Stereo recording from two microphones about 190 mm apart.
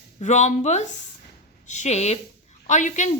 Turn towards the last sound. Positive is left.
turn(degrees=40)  # may be behind; listen again after turning